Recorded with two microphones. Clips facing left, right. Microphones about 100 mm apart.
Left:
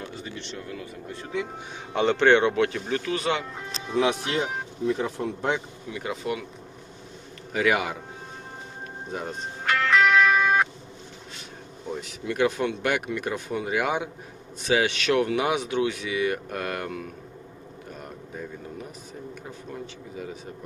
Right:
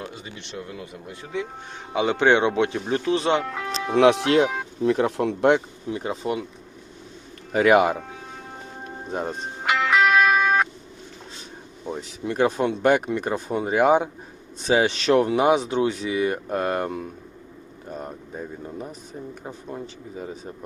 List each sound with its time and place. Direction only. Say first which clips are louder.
0.1 s speech: left 1 dB; 20° right (ahead or behind)
3.3 s speech: right 7 dB; 75° right (ahead or behind)
5.9 s speech: right 4 dB; 35° right (ahead or behind)
7.5 s speech: right 7 dB; 45° right (ahead or behind)
9.6 s music: right 1 dB; 10° right (ahead or behind)
11.9 s speech: right 2 dB; 30° right (ahead or behind)